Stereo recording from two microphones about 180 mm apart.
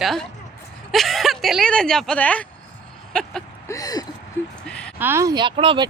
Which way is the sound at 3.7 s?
20° left (ahead or behind).